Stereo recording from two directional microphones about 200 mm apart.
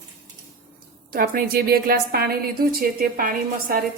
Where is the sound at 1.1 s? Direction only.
45° right (ahead or behind).